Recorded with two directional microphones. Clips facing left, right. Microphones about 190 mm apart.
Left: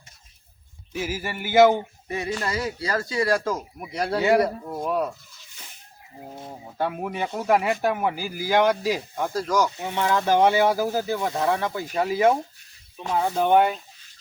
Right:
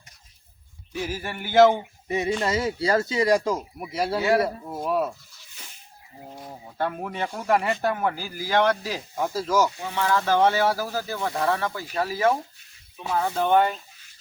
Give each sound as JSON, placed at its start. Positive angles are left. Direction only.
{"t": 0.9, "sound": "speech", "side_deg": 5}
{"t": 2.0, "sound": "speech", "side_deg": -20}
{"t": 3.8, "sound": "speech", "side_deg": 0}
{"t": 6.5, "sound": "speech", "side_deg": 10}
{"t": 9.1, "sound": "speech", "side_deg": -5}
{"t": 9.8, "sound": "speech", "side_deg": 20}